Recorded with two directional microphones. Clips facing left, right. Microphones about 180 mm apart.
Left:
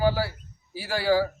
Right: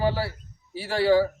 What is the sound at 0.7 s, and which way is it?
Speech, 25° right (ahead or behind).